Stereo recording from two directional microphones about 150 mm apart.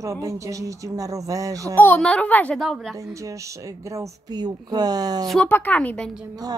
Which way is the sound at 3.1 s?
20° right (ahead or behind).